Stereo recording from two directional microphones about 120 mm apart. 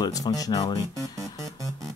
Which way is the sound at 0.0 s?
30° left (ahead or behind).